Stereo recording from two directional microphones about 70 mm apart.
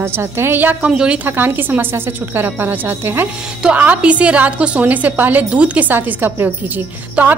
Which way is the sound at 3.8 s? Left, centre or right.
Centre.